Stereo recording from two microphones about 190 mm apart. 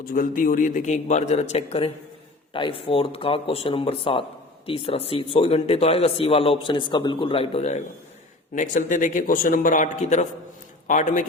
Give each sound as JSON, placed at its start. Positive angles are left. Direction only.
{"t": 0.0, "sound": "a man's voice", "side_deg": 50}